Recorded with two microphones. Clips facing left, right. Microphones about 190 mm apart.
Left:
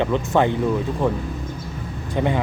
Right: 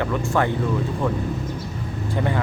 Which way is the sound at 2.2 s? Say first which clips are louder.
Left 3 dB; 20° left (ahead or behind).